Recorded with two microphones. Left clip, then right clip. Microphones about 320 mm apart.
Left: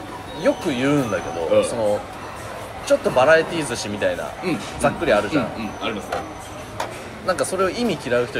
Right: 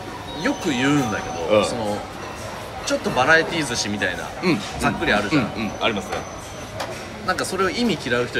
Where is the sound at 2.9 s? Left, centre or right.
Centre.